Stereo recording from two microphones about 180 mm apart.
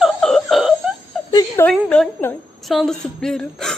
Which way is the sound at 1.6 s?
5° left (ahead or behind).